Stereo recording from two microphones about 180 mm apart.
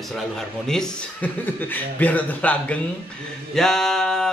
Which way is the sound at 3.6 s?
5° left (ahead or behind).